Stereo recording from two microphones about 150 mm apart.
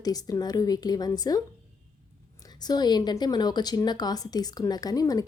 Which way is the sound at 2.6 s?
30° left (ahead or behind).